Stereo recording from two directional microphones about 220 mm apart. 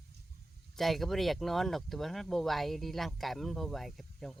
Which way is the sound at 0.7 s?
Centre (ahead or behind).